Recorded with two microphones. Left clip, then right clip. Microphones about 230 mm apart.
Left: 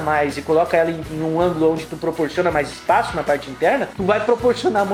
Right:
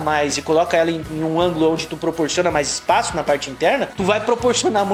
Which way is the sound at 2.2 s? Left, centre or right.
Right.